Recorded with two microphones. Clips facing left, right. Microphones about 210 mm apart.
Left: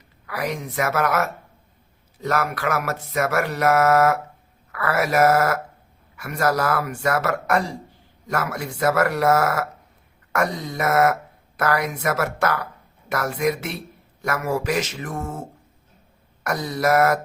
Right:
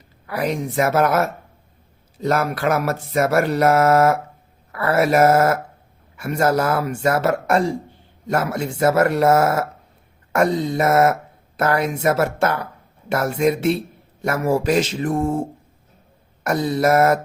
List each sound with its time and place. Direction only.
0.3 s a man's voice: 30° right (ahead or behind)
2.1 s a sound: 30° right (ahead or behind)
4.7 s a man's voice: 30° right (ahead or behind)